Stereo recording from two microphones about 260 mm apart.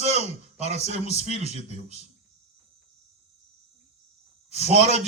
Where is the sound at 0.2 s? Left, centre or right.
Right.